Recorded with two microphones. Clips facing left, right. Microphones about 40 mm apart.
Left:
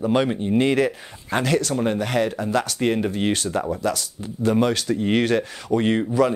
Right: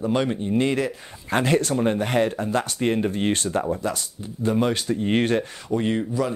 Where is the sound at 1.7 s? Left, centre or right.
Centre.